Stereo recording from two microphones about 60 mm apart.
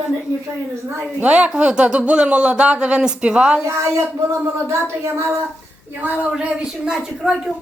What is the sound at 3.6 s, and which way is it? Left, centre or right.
Speech, right.